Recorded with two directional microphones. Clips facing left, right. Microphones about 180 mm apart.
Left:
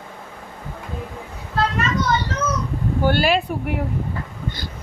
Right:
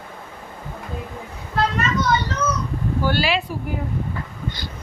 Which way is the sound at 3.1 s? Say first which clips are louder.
Left 4 dB; 50° left (ahead or behind).